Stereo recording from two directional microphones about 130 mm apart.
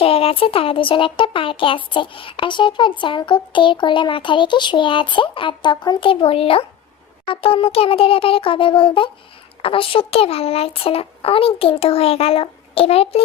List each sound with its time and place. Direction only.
0.0 s a child's voice: 50° left (ahead or behind)